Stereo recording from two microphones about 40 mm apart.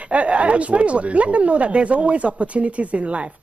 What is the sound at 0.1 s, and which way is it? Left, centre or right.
Speech, right.